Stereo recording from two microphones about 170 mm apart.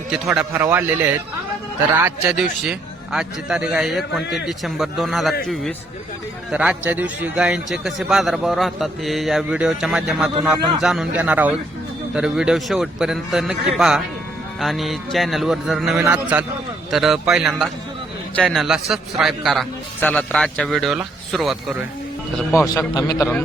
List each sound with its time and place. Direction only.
0.1 s a man's voice: 5° right (ahead or behind)
22.5 s a man's voice: 20° left (ahead or behind)